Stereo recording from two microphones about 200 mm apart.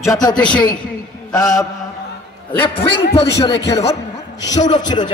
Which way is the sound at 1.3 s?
15° left (ahead or behind).